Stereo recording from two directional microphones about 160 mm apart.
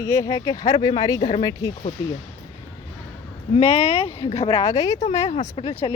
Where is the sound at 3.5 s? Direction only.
40° left (ahead or behind).